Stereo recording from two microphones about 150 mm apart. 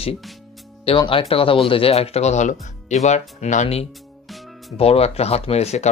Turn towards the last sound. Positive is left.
turn(degrees=45)  # may be behind; listen again after turning